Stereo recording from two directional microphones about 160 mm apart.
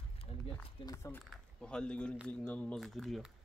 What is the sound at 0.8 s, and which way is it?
Speech, 20° left (ahead or behind).